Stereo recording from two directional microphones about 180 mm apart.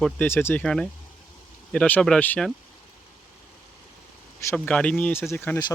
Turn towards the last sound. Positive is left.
turn(degrees=10)  # may be behind; listen again after turning